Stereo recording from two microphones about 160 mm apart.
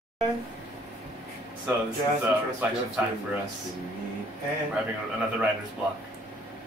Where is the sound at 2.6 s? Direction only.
10° right (ahead or behind).